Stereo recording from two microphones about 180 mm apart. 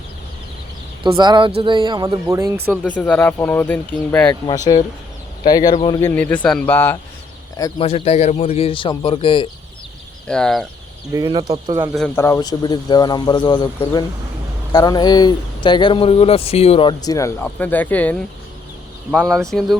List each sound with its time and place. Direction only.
1.1 s speech: 25° right (ahead or behind)
2.8 s speech: 10° left (ahead or behind)
4.3 s speech: 20° left (ahead or behind)
6.0 s speech: 10° left (ahead or behind)
7.8 s a man's voice: 30° left (ahead or behind)
10.2 s speech: 5° left (ahead or behind)
11.1 s speech: 25° right (ahead or behind)
12.1 s speech: 15° left (ahead or behind); by 16.9 s 35° left (ahead or behind)
17.0 s speech: 20° left (ahead or behind); by 19.7 s centre (ahead or behind)